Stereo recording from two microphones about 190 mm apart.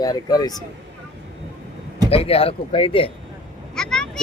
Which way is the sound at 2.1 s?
30° left (ahead or behind).